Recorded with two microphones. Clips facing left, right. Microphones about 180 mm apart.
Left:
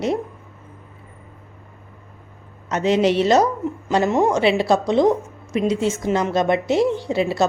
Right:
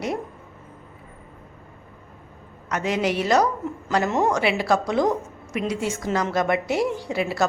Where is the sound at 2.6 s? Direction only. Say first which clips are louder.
Left 6 dB; 25° left (ahead or behind).